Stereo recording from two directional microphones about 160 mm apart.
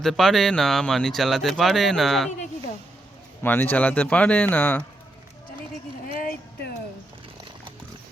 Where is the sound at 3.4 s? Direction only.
10° left (ahead or behind).